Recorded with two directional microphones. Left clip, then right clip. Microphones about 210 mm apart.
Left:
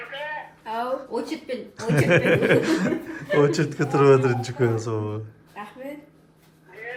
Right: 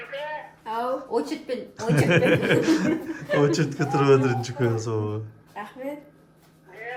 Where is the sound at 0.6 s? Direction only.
Centre (ahead or behind).